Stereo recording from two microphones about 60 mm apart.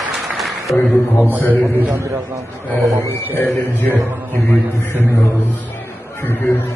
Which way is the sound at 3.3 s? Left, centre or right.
Left.